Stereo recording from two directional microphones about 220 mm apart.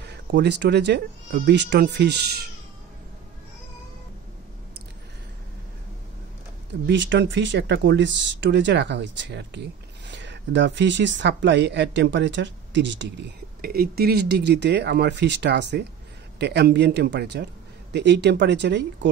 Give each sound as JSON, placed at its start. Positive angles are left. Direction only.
{"t": 0.0, "sound": "speech", "side_deg": -50}
{"t": 6.9, "sound": "speech", "side_deg": -55}
{"t": 13.6, "sound": "speech", "side_deg": -40}